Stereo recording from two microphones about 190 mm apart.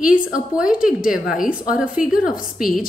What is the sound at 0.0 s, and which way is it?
Speech, 45° left (ahead or behind).